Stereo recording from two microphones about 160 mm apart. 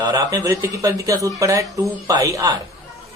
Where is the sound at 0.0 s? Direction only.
20° right (ahead or behind).